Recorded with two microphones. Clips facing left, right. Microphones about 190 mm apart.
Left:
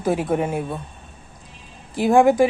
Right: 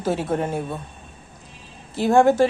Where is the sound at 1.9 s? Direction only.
10° left (ahead or behind).